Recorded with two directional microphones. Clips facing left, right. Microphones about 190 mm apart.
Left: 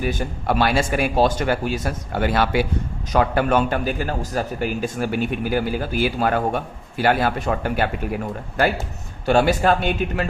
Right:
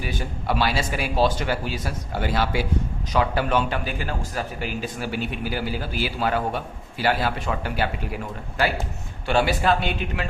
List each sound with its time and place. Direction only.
0.0 s a man's voice: 45° left (ahead or behind)
3.1 s a man's voice: 50° left (ahead or behind)
9.2 s a man's voice: 45° left (ahead or behind)